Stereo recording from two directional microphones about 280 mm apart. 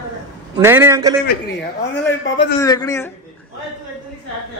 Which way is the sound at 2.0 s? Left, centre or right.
Left.